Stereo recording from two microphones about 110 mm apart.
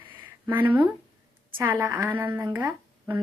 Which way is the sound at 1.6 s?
30° right (ahead or behind).